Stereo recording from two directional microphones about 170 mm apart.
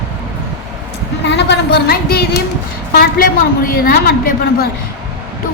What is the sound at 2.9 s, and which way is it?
A woman's voice, 60° left (ahead or behind).